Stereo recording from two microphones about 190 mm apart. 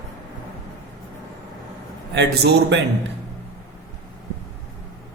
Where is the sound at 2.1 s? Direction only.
65° right (ahead or behind).